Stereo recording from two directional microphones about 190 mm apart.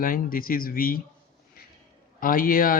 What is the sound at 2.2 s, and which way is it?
Speech, 50° left (ahead or behind).